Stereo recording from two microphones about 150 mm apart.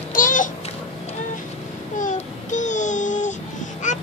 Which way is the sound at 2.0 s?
55° left (ahead or behind).